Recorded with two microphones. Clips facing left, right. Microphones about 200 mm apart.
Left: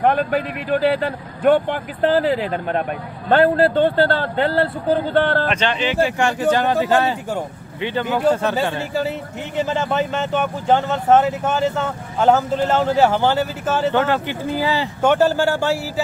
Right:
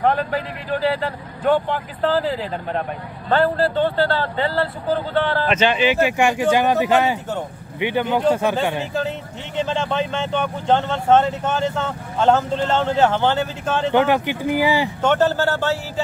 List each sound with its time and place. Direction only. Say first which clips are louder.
0.0 s a man's voice: left 2 dB; 55° left (ahead or behind)
5.5 s speech: right 3 dB; 5° right (ahead or behind)
9.6 s speech: left 1 dB; 10° left (ahead or behind)
13.9 s speech: right 2 dB; 15° right (ahead or behind)
15.0 s speech: left 6 dB; 10° left (ahead or behind)